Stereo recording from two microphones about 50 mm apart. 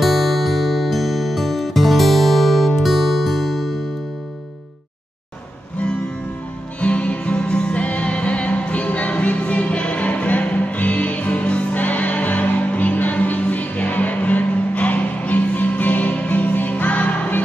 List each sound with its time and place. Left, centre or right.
0.0 s music: centre
6.8 s music: left